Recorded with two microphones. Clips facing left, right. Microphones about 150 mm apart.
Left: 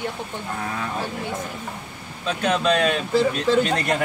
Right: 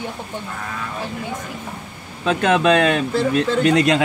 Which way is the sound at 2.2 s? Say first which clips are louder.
Right 5 dB; 70° right (ahead or behind).